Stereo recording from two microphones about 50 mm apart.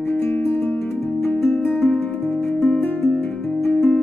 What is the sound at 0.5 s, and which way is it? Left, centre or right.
Music, left.